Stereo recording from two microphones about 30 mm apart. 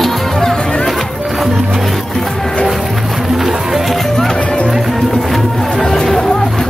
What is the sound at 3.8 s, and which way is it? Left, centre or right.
Music, centre.